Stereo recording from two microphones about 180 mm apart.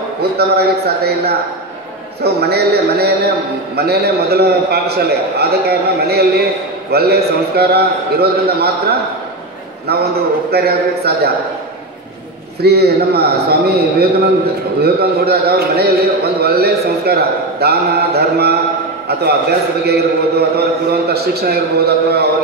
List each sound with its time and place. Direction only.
0.4 s speech: 60° right (ahead or behind)
12.6 s speech: 65° right (ahead or behind)
19.8 s speech: 65° right (ahead or behind)